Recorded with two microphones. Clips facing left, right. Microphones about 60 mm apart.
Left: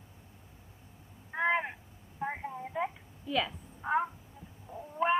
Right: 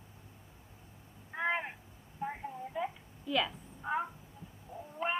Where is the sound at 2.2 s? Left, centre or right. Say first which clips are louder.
Left 3 dB; left.